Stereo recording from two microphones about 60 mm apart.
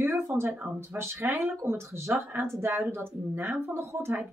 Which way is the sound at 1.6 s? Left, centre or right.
Right.